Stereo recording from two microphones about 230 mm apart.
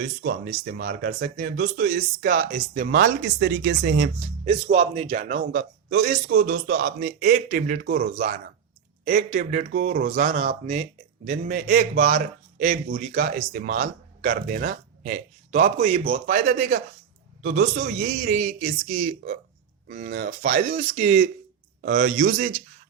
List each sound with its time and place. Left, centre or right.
0.0 s a man's voice: right
2.4 s speech: right
2.9 s a man's voice: right
4.4 s a man's voice: right
9.3 s speech: right
10.3 s speech: right
11.3 s a man's voice: right
11.9 s speech: right
17.4 s a man's voice: right
20.7 s speech: right
21.8 s a man's voice: right